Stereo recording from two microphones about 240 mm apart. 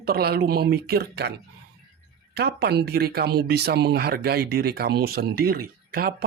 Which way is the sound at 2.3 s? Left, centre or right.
Right.